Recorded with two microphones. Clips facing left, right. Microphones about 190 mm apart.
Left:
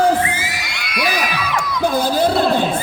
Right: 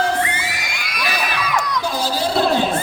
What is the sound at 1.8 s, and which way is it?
Crowd, 55° left (ahead or behind).